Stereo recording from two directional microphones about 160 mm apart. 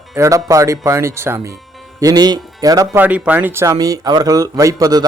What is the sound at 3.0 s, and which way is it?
Speech, 10° right (ahead or behind).